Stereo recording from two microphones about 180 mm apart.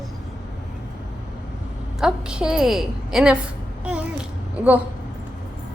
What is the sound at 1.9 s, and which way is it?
A woman's voice, 5° right (ahead or behind).